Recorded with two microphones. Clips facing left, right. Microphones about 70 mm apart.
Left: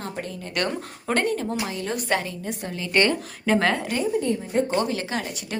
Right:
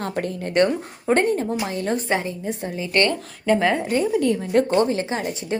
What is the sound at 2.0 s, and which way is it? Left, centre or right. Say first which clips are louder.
Speech: right 2 dB; right.